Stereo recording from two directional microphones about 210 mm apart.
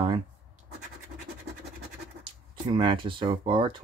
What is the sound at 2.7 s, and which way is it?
Speech, 25° right (ahead or behind).